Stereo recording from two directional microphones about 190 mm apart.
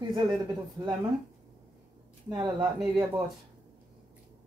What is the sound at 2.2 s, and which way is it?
Speech, 25° right (ahead or behind).